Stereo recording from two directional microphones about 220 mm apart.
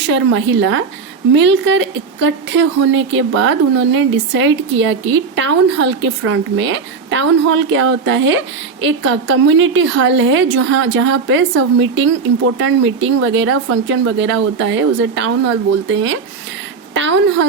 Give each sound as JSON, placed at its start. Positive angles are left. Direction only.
{"t": 0.1, "sound": "a woman's voice", "side_deg": -55}